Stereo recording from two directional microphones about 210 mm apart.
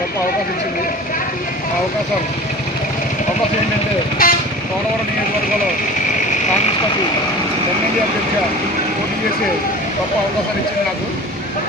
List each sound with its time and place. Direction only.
4.2 s vehicle: 40° left (ahead or behind)